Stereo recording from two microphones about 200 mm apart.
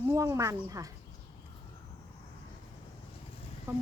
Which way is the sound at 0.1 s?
15° right (ahead or behind).